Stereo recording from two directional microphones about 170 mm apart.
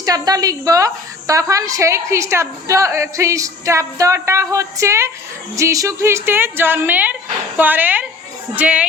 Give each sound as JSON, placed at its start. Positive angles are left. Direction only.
{"t": 0.0, "sound": "a woman's voice", "side_deg": -20}